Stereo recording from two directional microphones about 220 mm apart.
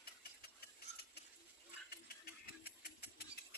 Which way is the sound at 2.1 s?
45° left (ahead or behind).